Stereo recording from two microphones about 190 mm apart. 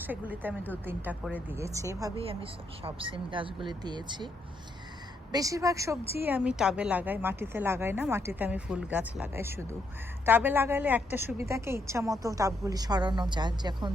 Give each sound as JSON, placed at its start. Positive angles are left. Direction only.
{"t": 0.0, "sound": "a woman's voice", "side_deg": -10}
{"t": 2.2, "sound": "a woman's voice", "side_deg": -30}
{"t": 5.3, "sound": "a woman's voice", "side_deg": -15}